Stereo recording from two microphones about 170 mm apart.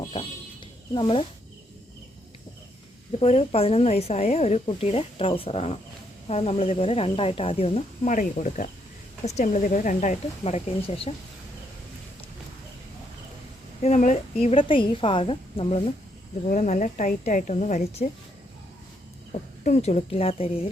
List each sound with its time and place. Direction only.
0.9 s speech: 30° left (ahead or behind)
3.1 s speech: 35° left (ahead or behind)
13.8 s speech: 45° left (ahead or behind)
14.5 s speech: 30° left (ahead or behind)
16.5 s speech: 45° left (ahead or behind)
19.3 s speech: 40° left (ahead or behind)